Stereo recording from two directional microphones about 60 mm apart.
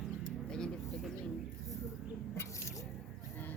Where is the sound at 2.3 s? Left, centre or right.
Left.